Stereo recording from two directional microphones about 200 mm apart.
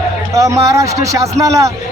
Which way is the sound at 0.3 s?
15° right (ahead or behind).